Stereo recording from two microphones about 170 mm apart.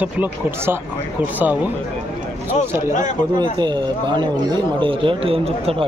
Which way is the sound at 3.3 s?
25° right (ahead or behind).